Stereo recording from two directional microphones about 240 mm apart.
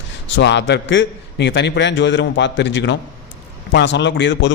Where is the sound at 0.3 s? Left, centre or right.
Left.